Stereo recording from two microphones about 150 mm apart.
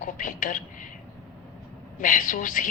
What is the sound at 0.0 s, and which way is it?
Speech, 60° left (ahead or behind).